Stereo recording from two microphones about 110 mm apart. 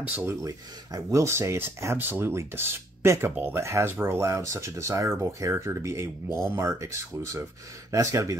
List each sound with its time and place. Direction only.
0.0 s speech: 15° right (ahead or behind)
0.3 s speech: 30° right (ahead or behind)
7.9 s speech: 30° right (ahead or behind)